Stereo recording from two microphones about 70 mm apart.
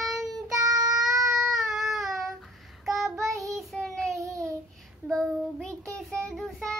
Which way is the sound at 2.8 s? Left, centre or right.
Centre.